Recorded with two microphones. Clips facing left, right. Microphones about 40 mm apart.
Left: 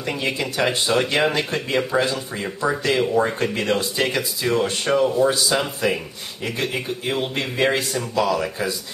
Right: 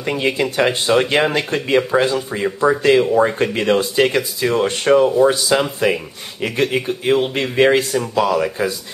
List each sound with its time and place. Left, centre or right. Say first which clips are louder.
0.1 s speech: right 6 dB; right